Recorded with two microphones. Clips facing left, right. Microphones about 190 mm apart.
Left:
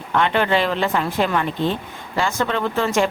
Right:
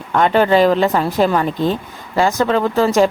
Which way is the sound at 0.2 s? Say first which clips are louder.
Right 6 dB; 40° right (ahead or behind).